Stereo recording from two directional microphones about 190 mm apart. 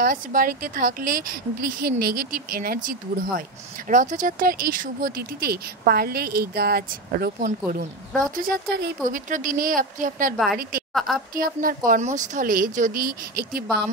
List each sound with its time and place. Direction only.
0.0 s speech: 50° right (ahead or behind)
10.3 s a woman's voice: centre (ahead or behind)
11.3 s speech: 50° right (ahead or behind)